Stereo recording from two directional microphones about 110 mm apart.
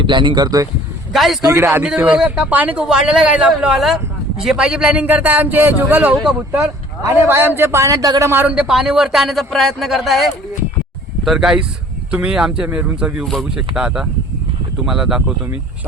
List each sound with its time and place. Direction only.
0.0 s speech: 45° right (ahead or behind)
1.1 s a man's voice: centre (ahead or behind)
1.5 s a man's voice: 25° right (ahead or behind)
1.8 s a man's voice: 10° right (ahead or behind); by 8.3 s 35° right (ahead or behind)
8.3 s a man's voice: 20° right (ahead or behind)
8.5 s a man's voice: 5° right (ahead or behind)
13.2 s a man's voice: centre (ahead or behind)